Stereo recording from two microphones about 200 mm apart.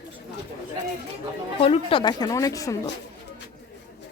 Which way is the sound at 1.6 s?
25° left (ahead or behind).